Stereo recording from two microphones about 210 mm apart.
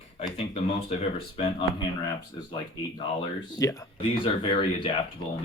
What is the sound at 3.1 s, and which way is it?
Speech, 15° left (ahead or behind).